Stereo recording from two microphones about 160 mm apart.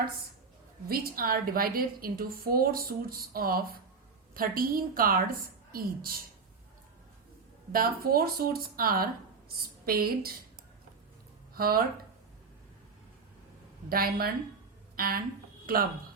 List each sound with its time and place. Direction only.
0.9 s a woman's voice: 70° right (ahead or behind)
7.7 s a woman's voice: 65° right (ahead or behind)
11.5 s speech: 70° right (ahead or behind)
13.9 s a woman's voice: 65° right (ahead or behind)